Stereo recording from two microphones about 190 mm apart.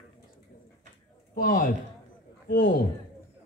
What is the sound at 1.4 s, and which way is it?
A man's voice, 45° left (ahead or behind).